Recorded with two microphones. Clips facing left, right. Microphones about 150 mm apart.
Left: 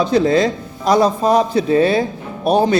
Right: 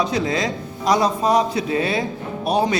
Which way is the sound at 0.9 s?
30° left (ahead or behind).